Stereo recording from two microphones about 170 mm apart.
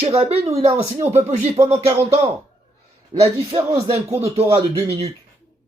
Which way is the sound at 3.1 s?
35° right (ahead or behind).